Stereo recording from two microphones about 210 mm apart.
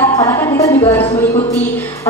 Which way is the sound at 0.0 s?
10° left (ahead or behind).